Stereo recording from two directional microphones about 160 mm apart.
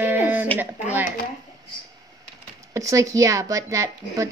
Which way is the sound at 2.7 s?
20° right (ahead or behind).